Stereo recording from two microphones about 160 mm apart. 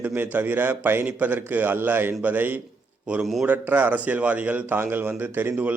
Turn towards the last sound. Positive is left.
turn(degrees=-10)  # may be behind; listen again after turning